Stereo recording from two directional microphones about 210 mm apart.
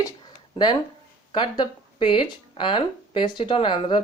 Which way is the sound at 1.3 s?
20° left (ahead or behind).